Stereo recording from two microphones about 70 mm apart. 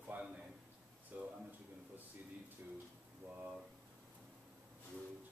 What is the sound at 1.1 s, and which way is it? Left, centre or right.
Speech, right.